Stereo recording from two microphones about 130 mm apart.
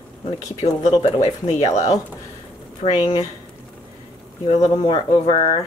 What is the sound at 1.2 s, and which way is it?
Speech, 60° left (ahead or behind).